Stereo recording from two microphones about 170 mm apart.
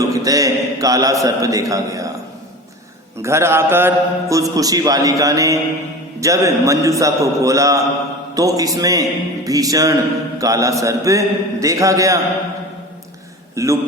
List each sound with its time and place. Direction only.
0.1 s a man's voice: 20° right (ahead or behind)
3.2 s a man's voice: 15° right (ahead or behind)
13.6 s a man's voice: 15° right (ahead or behind)